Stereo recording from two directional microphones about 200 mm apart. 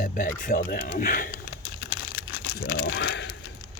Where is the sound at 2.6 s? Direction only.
60° left (ahead or behind).